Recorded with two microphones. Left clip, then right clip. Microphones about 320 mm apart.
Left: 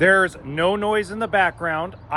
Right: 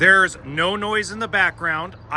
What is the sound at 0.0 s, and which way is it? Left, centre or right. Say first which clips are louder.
Speech: right 2 dB; centre.